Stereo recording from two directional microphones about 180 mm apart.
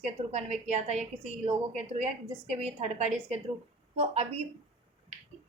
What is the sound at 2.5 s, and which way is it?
Speech, 35° right (ahead or behind).